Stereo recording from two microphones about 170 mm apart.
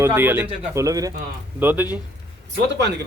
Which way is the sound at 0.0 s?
15° right (ahead or behind).